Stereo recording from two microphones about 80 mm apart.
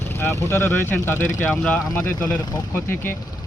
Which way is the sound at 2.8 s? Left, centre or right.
Left.